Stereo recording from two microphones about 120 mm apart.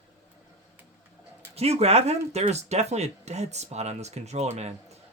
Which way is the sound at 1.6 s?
60° right (ahead or behind).